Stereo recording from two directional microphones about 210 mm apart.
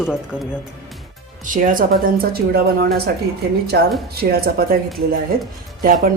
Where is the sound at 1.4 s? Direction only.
40° right (ahead or behind).